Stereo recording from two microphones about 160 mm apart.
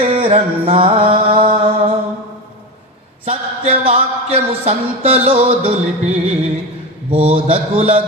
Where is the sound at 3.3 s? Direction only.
40° right (ahead or behind).